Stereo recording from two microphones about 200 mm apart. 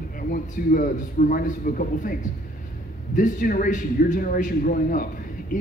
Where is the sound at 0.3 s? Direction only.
40° left (ahead or behind).